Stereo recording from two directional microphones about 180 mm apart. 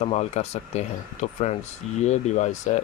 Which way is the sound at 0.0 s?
35° left (ahead or behind).